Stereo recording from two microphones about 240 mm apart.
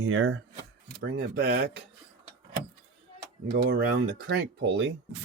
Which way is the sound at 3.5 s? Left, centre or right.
Right.